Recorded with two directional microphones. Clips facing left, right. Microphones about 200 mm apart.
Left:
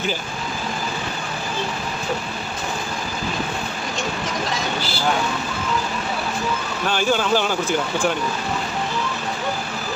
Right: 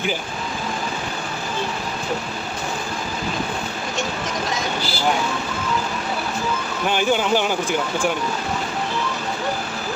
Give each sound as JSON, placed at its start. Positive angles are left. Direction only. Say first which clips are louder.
{"t": 6.8, "sound": "speech", "louder": "right 1 dB", "side_deg": -15}